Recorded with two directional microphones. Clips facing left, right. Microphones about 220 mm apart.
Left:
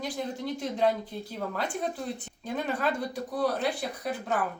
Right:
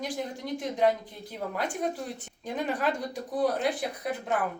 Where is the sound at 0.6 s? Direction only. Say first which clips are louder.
Right 2 dB; 15° right (ahead or behind).